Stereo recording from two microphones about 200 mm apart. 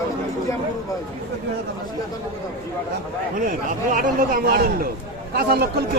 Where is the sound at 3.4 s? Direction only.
40° right (ahead or behind).